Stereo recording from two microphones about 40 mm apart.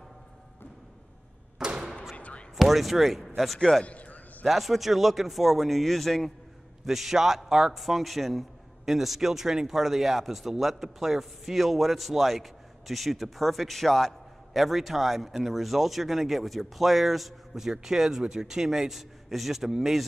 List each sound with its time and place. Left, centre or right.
1.6 s thump: right
2.1 s a sound: left
2.5 s speech: centre
3.8 s a sound: left
4.5 s a man's voice: centre
6.9 s a man's voice: centre